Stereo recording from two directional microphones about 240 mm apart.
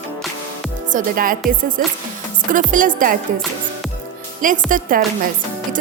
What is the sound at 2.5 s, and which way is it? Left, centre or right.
Speech, right.